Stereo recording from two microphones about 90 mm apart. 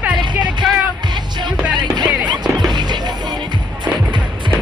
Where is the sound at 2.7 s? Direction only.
55° right (ahead or behind).